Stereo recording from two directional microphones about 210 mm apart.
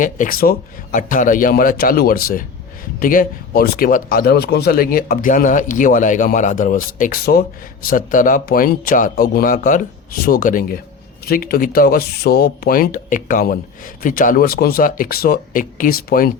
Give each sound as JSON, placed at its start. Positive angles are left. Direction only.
{"t": 0.0, "sound": "speech", "side_deg": 40}